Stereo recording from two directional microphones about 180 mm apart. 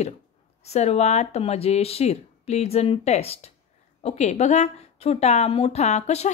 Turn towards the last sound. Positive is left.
turn(degrees=40)  # may be behind; listen again after turning